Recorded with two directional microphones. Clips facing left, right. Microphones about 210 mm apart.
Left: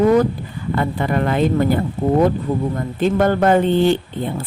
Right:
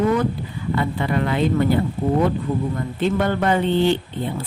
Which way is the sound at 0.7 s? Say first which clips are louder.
Left 2 dB; 50° left (ahead or behind).